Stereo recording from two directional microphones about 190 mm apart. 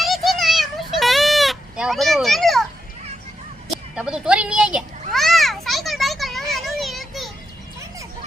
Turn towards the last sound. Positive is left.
turn(degrees=0)  # may be behind; listen again after turning